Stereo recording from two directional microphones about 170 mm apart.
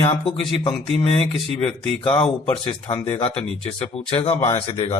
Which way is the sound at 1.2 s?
5° left (ahead or behind).